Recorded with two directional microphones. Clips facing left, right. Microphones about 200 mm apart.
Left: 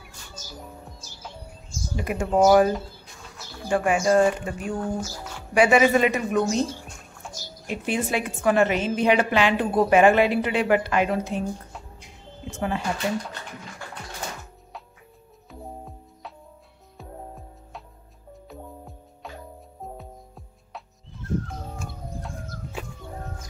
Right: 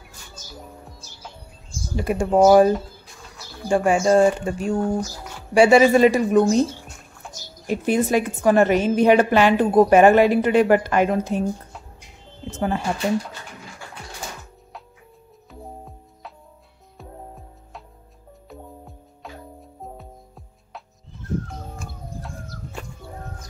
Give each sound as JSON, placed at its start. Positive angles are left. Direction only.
{"t": 2.0, "sound": "speech", "side_deg": -30}
{"t": 7.2, "sound": "a sound", "side_deg": 0}
{"t": 7.6, "sound": "a woman's voice", "side_deg": -40}
{"t": 12.4, "sound": "speech", "side_deg": -40}
{"t": 17.0, "sound": "music", "side_deg": 0}